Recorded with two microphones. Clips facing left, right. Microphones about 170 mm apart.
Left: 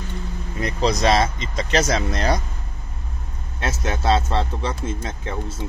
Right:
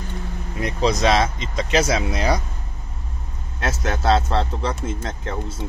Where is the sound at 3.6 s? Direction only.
Centre (ahead or behind).